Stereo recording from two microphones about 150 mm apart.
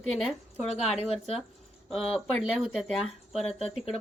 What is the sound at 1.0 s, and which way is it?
Speech, 40° left (ahead or behind).